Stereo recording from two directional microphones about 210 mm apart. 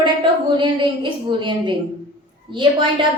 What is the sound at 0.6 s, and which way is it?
A woman's voice, 20° right (ahead or behind).